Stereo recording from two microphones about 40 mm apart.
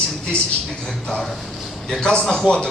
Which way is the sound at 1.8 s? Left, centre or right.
Centre.